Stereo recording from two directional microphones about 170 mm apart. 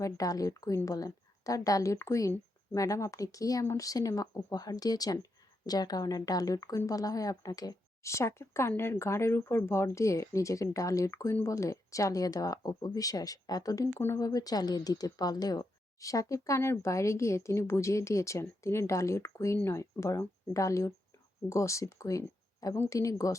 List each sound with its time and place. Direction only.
0.0 s speech: 20° left (ahead or behind)